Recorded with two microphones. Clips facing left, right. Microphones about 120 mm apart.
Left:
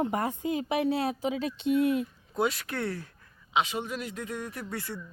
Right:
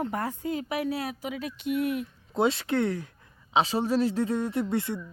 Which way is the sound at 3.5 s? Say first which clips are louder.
Right 5 dB; 35° right (ahead or behind).